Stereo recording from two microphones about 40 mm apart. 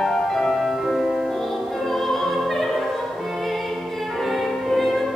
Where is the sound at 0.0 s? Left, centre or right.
Centre.